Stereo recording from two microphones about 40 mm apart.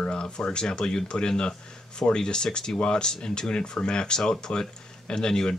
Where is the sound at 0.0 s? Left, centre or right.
Left.